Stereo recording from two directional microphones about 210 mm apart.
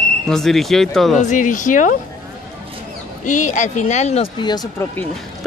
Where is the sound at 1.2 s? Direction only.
40° left (ahead or behind).